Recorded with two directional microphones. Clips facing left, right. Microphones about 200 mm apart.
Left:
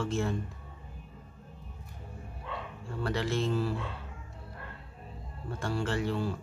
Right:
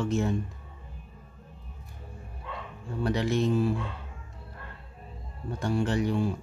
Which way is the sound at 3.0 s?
15° right (ahead or behind).